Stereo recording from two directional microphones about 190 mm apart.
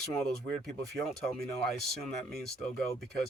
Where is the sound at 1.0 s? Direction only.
Centre (ahead or behind).